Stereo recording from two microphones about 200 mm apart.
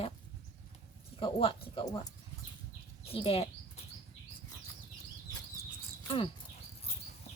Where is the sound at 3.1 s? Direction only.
30° left (ahead or behind).